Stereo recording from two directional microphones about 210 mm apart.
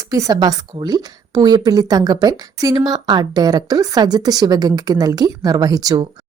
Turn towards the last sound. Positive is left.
turn(degrees=-20)  # may be behind; listen again after turning